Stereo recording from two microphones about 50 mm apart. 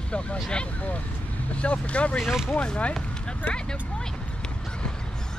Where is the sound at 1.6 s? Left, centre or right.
Left.